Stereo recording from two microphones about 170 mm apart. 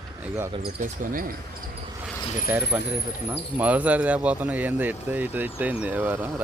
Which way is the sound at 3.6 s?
10° right (ahead or behind).